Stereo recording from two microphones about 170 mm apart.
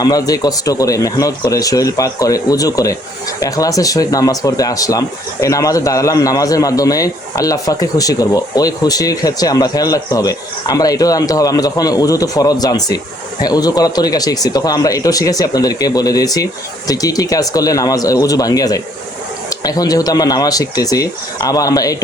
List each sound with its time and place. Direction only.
0.0 s speech: 20° left (ahead or behind)